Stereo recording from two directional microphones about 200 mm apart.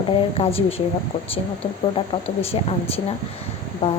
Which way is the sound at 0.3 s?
30° left (ahead or behind).